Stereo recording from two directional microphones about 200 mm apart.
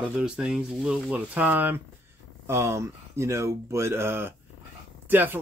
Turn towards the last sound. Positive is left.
turn(degrees=-10)  # may be behind; listen again after turning